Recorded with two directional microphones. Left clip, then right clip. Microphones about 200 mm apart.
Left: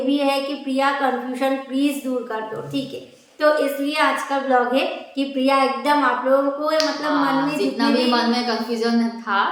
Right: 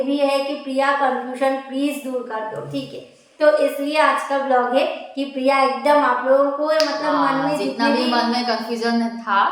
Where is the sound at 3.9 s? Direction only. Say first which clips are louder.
Right 3 dB; 20° left (ahead or behind).